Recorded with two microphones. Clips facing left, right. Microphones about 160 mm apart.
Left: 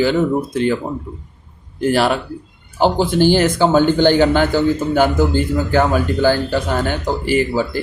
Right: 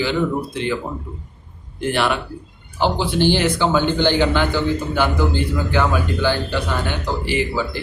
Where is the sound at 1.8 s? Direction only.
40° left (ahead or behind).